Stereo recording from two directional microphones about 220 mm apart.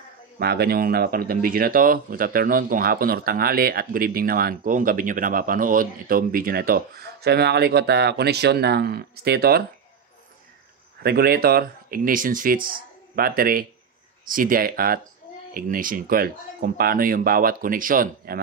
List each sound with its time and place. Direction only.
0.4 s speech: 45° right (ahead or behind)
11.0 s speech: 45° right (ahead or behind)